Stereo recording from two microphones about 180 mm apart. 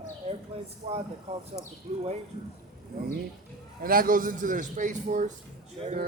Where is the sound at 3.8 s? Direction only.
50° right (ahead or behind).